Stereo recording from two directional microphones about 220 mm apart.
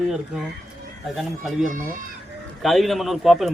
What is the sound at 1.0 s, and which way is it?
Speech, centre (ahead or behind).